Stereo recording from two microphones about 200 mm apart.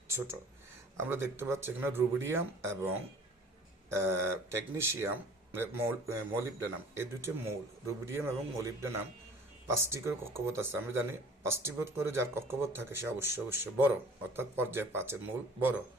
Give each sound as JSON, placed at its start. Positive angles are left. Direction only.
{"t": 1.0, "sound": "speech", "side_deg": -10}